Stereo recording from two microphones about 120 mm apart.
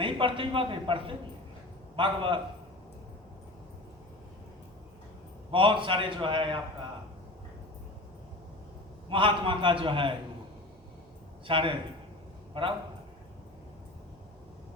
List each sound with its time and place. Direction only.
0.0 s a man's voice: 45° right (ahead or behind)
5.5 s a man's voice: 45° right (ahead or behind)
9.0 s a man's voice: 45° right (ahead or behind)
11.4 s a man's voice: 45° right (ahead or behind)